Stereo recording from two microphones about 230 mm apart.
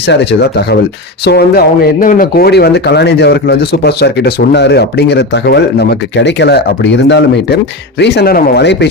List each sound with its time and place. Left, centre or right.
0.1 s speech: left